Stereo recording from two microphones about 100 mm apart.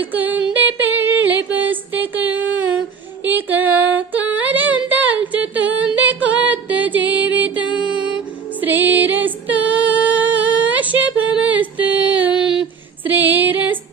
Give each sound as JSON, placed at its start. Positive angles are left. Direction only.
{"t": 0.0, "sound": "a sound", "side_deg": -15}
{"t": 1.5, "sound": "music", "side_deg": -20}
{"t": 3.2, "sound": "female singing", "side_deg": -20}
{"t": 6.2, "sound": "music", "side_deg": -15}
{"t": 8.6, "sound": "female singing", "side_deg": -20}
{"t": 11.4, "sound": "a sound", "side_deg": -15}
{"t": 13.1, "sound": "female singing", "side_deg": -20}